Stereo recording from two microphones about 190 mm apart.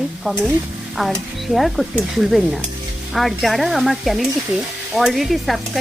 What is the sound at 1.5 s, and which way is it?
Speech, centre (ahead or behind).